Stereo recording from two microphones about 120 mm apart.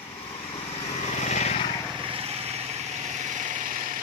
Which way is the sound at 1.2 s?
70° left (ahead or behind).